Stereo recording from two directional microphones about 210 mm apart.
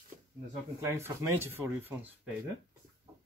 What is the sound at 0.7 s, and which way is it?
Speech, 10° right (ahead or behind).